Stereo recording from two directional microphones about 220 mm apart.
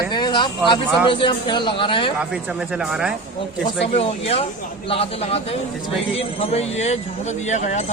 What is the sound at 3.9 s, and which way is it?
A man's voice, 25° left (ahead or behind).